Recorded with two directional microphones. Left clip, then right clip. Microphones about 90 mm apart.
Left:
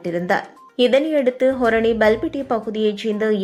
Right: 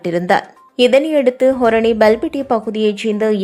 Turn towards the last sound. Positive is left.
turn(degrees=-30)  # may be behind; listen again after turning